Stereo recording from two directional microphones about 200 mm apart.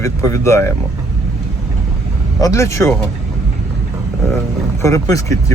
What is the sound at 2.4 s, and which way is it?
Speech, 15° left (ahead or behind).